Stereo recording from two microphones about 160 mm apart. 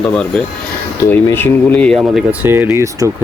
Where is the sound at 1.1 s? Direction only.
15° left (ahead or behind).